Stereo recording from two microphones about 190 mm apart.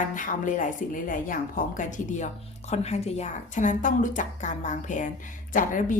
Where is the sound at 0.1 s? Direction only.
45° left (ahead or behind).